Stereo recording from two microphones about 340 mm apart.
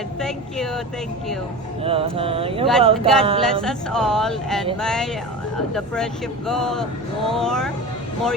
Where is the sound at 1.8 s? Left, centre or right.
Centre.